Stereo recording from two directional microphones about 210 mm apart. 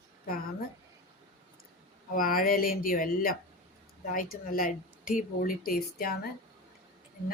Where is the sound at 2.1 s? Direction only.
45° left (ahead or behind).